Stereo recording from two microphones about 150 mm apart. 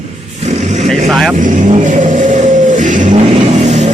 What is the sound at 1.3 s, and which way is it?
Vehicle, 60° right (ahead or behind).